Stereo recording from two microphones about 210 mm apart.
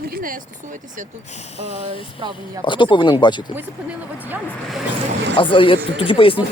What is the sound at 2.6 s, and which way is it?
Speech, 25° left (ahead or behind).